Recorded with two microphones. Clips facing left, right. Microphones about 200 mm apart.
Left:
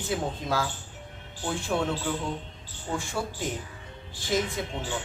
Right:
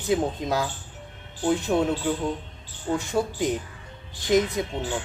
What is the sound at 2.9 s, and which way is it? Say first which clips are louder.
Speech: right 6 dB; 20° right (ahead or behind).